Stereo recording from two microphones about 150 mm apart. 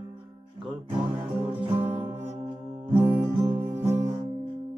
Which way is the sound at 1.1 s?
35° right (ahead or behind).